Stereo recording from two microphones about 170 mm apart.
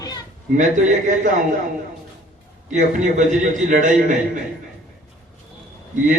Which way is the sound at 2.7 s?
45° right (ahead or behind).